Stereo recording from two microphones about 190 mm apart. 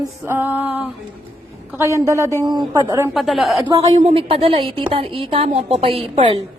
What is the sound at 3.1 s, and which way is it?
Speech, centre (ahead or behind).